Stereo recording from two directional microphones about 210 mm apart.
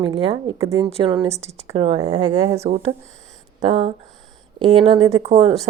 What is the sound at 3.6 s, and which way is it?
Speech, 30° right (ahead or behind).